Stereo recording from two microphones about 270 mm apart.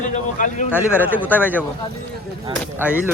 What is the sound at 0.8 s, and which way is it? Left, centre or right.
Speech, centre.